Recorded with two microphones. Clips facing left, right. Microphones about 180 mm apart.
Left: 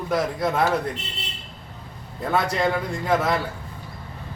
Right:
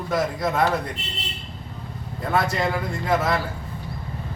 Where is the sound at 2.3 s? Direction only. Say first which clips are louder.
Left 1 dB; 5° right (ahead or behind).